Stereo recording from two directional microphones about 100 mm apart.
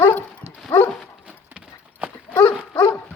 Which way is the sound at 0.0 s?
20° left (ahead or behind).